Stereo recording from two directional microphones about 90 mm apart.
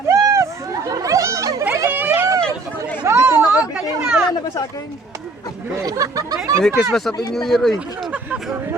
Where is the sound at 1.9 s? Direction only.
20° right (ahead or behind).